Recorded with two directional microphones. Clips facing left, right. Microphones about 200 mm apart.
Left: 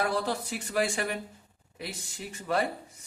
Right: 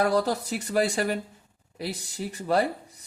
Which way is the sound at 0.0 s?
40° right (ahead or behind).